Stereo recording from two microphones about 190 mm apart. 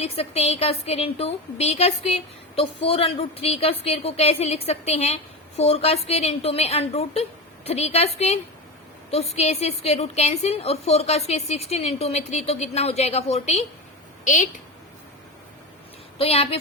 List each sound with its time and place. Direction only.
0.0 s a woman's voice: 30° left (ahead or behind)
16.1 s a woman's voice: 30° left (ahead or behind)